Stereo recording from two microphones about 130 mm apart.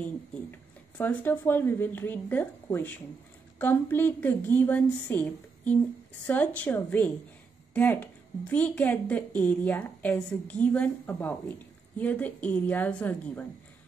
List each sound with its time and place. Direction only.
0.5 s a woman's voice: 15° left (ahead or behind)